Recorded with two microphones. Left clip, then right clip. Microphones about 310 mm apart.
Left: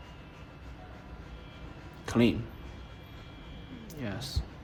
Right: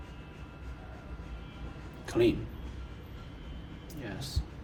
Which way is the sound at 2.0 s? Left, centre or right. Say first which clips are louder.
Right 1 dB; left.